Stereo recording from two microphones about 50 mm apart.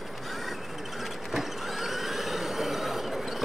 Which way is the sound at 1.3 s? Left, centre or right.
Centre.